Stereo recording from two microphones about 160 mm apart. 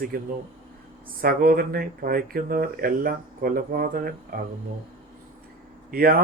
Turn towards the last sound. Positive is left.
turn(degrees=-70)  # may be behind; listen again after turning